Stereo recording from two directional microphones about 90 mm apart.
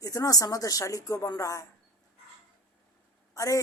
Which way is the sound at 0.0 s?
40° left (ahead or behind).